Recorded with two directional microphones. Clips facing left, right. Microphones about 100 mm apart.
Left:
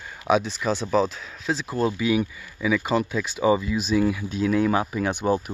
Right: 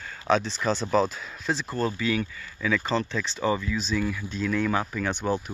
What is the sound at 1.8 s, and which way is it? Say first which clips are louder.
Speech: left 6 dB; 15° left (ahead or behind).